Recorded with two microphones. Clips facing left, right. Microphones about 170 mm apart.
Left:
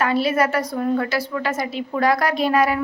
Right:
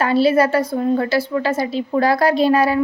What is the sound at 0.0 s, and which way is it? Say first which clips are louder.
A woman's voice: right 4 dB; 30° right (ahead or behind).